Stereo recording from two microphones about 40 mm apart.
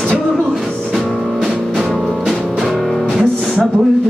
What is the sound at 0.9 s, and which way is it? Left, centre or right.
Music, centre.